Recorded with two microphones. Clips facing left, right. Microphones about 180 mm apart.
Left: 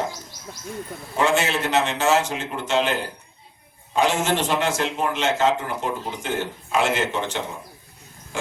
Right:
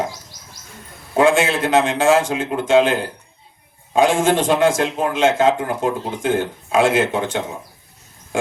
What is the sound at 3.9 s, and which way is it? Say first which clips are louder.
A man's voice: right 6 dB; 50° right (ahead or behind).